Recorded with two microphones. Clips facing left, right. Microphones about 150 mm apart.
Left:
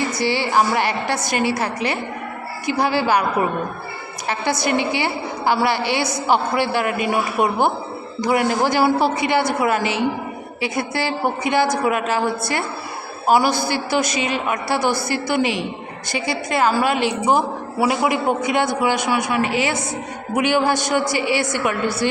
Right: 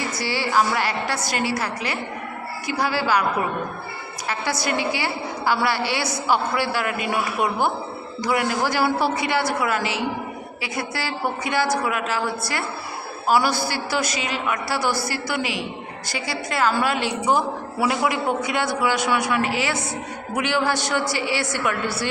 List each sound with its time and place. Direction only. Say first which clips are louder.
0.2 s a man's voice: left 2 dB; 20° left (ahead or behind)
4.3 s a man's voice: left 4 dB; 20° left (ahead or behind)
8.2 s a man's voice: left 4 dB; 20° left (ahead or behind)